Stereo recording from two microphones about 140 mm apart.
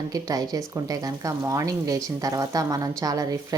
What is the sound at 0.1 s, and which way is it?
Speech, 25° right (ahead or behind).